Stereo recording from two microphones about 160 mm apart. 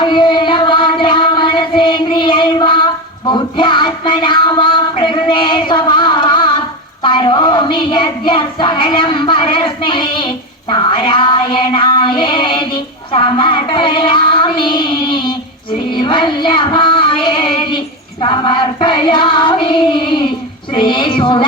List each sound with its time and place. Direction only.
0.0 s music: 30° left (ahead or behind)
7.0 s child singing: 30° left (ahead or behind)